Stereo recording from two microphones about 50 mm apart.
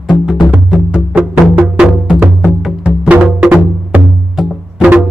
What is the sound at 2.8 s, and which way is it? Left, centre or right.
Music, right.